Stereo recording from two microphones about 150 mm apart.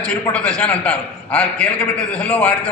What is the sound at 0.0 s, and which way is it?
A man's voice, 5° left (ahead or behind).